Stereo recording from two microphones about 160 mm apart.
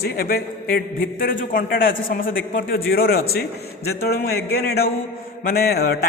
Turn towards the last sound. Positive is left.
turn(degrees=80)